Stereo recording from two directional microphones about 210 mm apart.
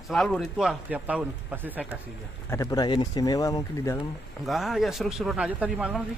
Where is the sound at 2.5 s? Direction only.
15° left (ahead or behind).